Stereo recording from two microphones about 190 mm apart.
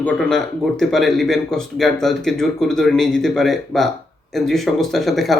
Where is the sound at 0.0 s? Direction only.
5° left (ahead or behind).